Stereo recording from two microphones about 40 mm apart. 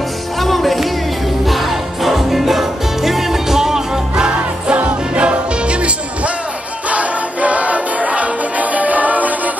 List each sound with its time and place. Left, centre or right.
0.4 s music: centre
4.7 s music: right